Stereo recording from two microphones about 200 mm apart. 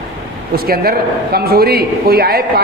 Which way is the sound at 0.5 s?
50° right (ahead or behind).